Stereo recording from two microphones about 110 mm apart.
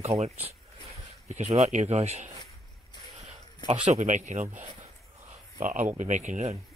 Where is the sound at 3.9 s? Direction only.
90° right.